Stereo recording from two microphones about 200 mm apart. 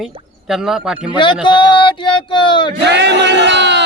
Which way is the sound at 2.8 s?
60° right (ahead or behind).